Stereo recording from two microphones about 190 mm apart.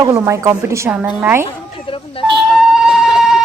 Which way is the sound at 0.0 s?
15° right (ahead or behind).